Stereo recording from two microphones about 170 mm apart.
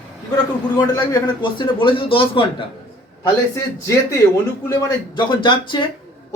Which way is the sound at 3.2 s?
15° left (ahead or behind).